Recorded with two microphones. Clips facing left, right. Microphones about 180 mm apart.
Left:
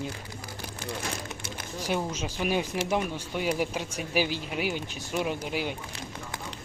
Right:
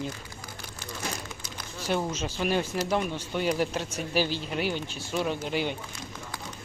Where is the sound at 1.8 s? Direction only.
10° left (ahead or behind).